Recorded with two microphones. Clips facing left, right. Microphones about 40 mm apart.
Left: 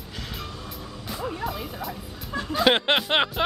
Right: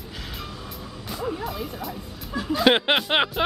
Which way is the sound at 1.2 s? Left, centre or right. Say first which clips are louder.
Right 1 dB; centre.